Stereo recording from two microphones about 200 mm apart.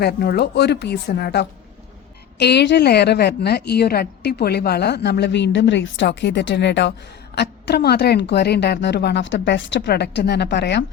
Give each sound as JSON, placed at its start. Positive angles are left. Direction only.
{"t": 0.0, "sound": "a woman's voice", "side_deg": 55}